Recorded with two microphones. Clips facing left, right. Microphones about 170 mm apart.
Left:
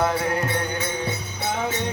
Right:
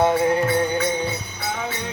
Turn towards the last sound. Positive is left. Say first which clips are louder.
# right 5 dB
turn(degrees=-25)  # may be behind; listen again after turning